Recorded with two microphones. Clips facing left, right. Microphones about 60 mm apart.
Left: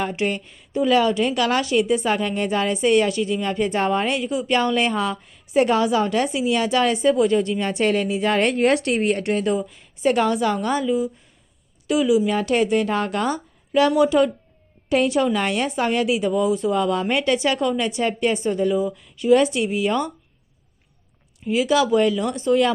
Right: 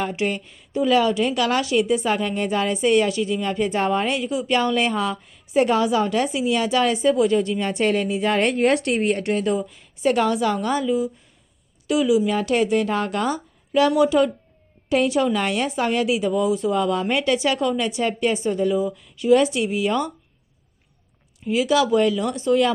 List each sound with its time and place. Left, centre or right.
0.0 s a woman's voice: left
4.2 s a woman's voice: left
9.0 s a woman's voice: left
9.3 s a woman's voice: left
21.4 s a woman's voice: left